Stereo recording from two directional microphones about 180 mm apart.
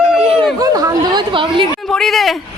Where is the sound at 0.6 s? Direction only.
20° right (ahead or behind).